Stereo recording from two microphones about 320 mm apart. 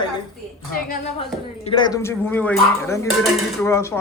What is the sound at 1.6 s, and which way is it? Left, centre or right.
A man's voice, centre.